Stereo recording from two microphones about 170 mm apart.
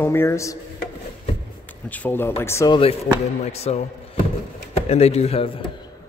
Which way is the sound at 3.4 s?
40° left (ahead or behind).